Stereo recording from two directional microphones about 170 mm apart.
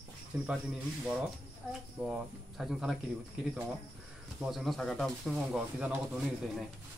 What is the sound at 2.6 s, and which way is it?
Speech, centre (ahead or behind).